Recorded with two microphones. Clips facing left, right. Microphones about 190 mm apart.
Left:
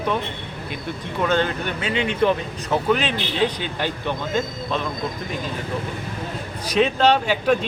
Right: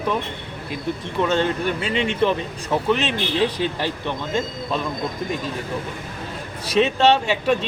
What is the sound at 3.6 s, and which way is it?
Speech, 30° right (ahead or behind).